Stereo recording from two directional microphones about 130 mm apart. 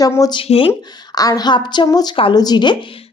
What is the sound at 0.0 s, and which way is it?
Speech, 25° left (ahead or behind).